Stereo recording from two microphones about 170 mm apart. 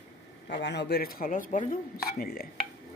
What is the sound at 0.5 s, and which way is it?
Speech, 90° left.